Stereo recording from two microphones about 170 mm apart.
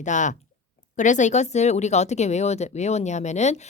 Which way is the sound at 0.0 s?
45° left (ahead or behind).